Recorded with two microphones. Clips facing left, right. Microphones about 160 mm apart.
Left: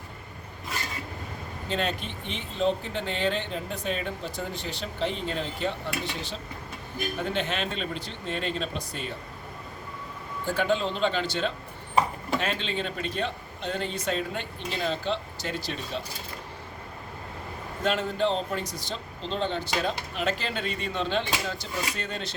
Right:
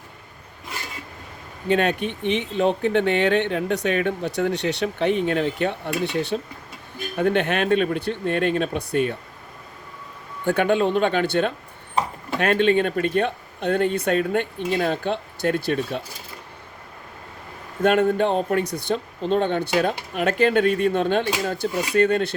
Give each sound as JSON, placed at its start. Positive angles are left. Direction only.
{"t": 1.6, "sound": "speech", "side_deg": -60}
{"t": 10.4, "sound": "speech", "side_deg": -60}
{"t": 17.8, "sound": "speech", "side_deg": -55}